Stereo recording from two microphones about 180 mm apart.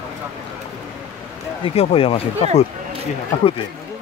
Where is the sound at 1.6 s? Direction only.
35° left (ahead or behind).